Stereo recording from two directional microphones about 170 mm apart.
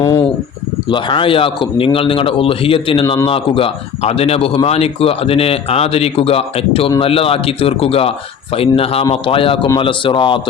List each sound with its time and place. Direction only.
0.9 s speech: 30° left (ahead or behind)